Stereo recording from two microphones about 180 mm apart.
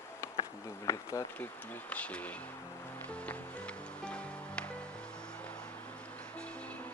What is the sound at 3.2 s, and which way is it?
Music, 5° left (ahead or behind).